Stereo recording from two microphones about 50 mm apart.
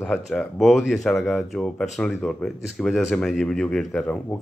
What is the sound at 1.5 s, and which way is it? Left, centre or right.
Speech, centre.